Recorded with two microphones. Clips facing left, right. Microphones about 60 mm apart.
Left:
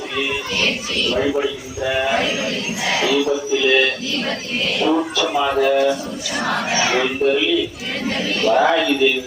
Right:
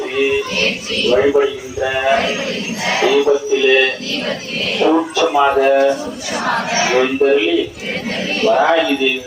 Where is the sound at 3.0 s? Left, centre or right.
Right.